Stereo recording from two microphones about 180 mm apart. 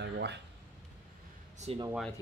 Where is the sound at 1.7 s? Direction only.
35° right (ahead or behind).